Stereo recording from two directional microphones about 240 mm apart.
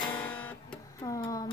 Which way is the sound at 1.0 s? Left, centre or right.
Centre.